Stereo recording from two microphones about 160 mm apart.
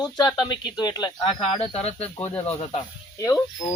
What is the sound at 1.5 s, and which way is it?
Speech, 40° left (ahead or behind).